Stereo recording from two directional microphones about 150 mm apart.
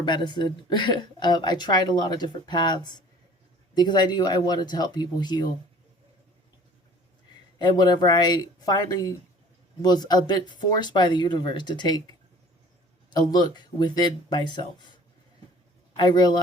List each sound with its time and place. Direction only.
0.0 s a woman's voice: 30° left (ahead or behind)
7.6 s a woman's voice: 25° left (ahead or behind)
13.1 s a woman's voice: 30° left (ahead or behind)
16.0 s a woman's voice: 25° left (ahead or behind)